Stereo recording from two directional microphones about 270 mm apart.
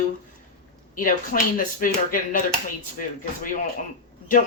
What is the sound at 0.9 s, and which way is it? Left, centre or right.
Speech, left.